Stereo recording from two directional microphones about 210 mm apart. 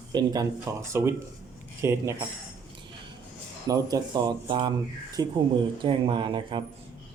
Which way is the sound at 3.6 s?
15° right (ahead or behind).